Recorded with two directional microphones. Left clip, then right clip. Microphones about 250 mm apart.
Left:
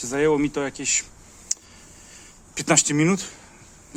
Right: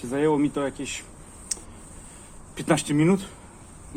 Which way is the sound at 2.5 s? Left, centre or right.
Left.